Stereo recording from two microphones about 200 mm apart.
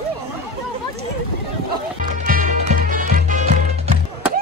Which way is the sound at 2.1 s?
40° right (ahead or behind).